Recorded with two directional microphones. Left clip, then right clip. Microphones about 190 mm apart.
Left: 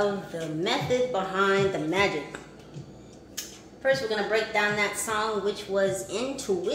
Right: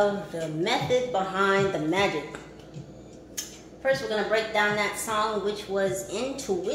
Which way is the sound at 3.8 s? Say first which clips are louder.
Even; 15° left (ahead or behind).